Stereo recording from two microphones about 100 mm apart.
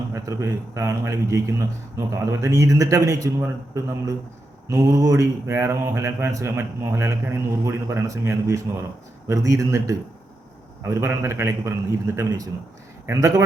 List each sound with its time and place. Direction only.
0.1 s a man's voice: 30° right (ahead or behind)
3.4 s mantra: 30° right (ahead or behind)
9.2 s a man's voice: 35° right (ahead or behind)
10.8 s mantra: 25° right (ahead or behind)
13.1 s a man's voice: 35° right (ahead or behind)